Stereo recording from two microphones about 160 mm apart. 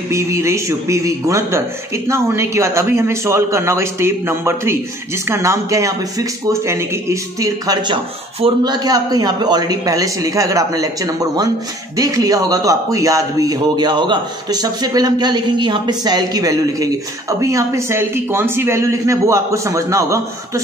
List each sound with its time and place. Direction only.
0.1 s a man's voice: 20° right (ahead or behind)